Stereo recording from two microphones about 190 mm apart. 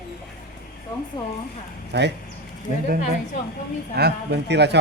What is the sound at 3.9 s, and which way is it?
Speech, 60° right (ahead or behind).